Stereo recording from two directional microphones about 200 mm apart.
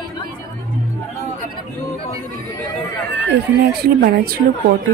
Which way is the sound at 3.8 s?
50° right (ahead or behind).